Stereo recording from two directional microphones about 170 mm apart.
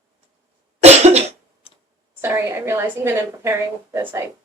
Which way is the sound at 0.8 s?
40° right (ahead or behind).